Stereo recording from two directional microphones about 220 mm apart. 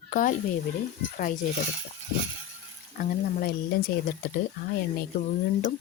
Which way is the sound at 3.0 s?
40° left (ahead or behind).